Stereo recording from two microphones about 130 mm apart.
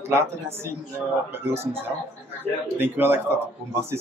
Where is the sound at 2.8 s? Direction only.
15° right (ahead or behind).